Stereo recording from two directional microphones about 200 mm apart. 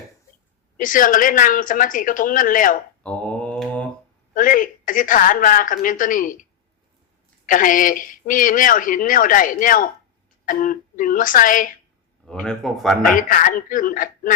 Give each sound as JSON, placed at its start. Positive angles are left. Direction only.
{"t": 0.8, "sound": "speech", "side_deg": 40}
{"t": 3.0, "sound": "mantra", "side_deg": 5}
{"t": 4.4, "sound": "speech", "side_deg": 40}
{"t": 7.4, "sound": "speech", "side_deg": 40}
{"t": 12.2, "sound": "speech", "side_deg": 5}
{"t": 13.1, "sound": "speech", "side_deg": 45}